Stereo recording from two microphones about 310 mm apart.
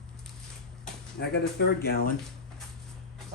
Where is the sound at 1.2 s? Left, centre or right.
Left.